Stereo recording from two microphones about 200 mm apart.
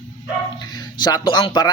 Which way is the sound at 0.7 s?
20° left (ahead or behind).